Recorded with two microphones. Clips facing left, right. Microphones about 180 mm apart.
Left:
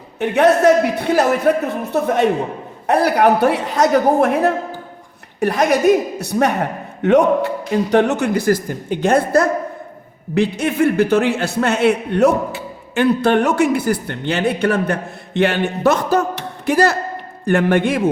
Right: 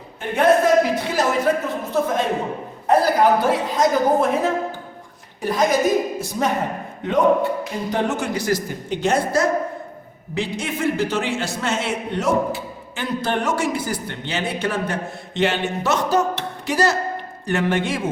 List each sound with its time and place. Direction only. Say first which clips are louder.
0.2 s a woman's voice: left 3 dB; 75° left (ahead or behind); by 18.0 s 55° left (ahead or behind)